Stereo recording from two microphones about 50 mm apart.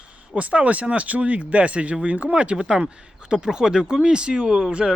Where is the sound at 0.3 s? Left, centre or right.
Right.